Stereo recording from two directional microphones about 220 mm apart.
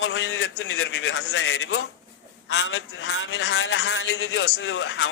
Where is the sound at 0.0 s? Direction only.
60° left (ahead or behind).